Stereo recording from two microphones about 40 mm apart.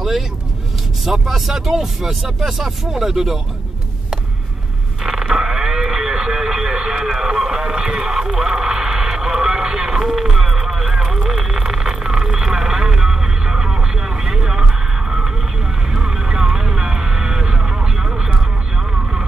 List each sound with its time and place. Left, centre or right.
1.0 s speech: centre
5.3 s vehicle: centre
10.1 s vehicle: centre